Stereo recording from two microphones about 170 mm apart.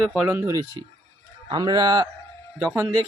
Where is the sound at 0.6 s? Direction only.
25° right (ahead or behind).